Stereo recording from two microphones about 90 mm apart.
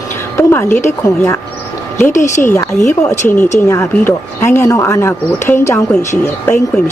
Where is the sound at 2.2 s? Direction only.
30° left (ahead or behind).